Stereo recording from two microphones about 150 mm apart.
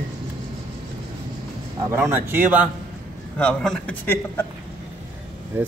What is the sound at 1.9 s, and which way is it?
Speech, 15° right (ahead or behind).